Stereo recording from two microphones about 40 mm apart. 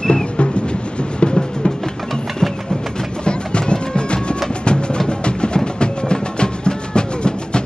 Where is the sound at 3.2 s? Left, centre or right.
Left.